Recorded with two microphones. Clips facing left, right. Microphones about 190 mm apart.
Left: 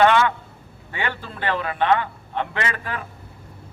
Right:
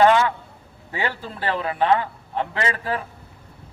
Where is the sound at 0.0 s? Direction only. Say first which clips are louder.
Right 1 dB; 35° right (ahead or behind).